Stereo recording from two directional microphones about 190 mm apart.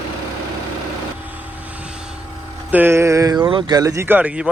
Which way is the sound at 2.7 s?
10° right (ahead or behind).